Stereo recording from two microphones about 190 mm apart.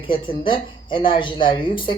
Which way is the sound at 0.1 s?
25° left (ahead or behind).